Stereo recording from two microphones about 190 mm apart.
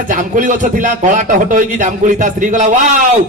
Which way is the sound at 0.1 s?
40° right (ahead or behind).